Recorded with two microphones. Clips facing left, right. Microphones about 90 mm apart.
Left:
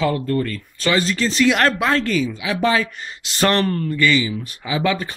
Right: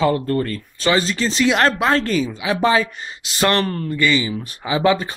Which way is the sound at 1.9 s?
30° right (ahead or behind).